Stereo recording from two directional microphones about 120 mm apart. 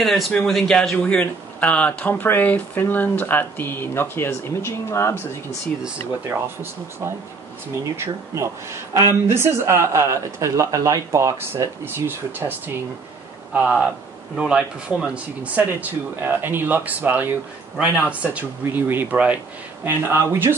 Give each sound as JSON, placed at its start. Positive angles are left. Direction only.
{"t": 0.0, "sound": "a man's voice", "side_deg": 0}
{"t": 0.9, "sound": "speech", "side_deg": 10}
{"t": 6.2, "sound": "speech", "side_deg": -20}
{"t": 8.9, "sound": "speech", "side_deg": -20}